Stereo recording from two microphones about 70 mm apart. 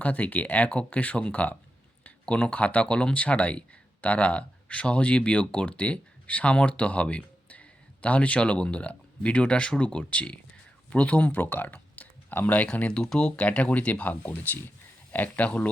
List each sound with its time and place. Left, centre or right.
0.0 s speech: left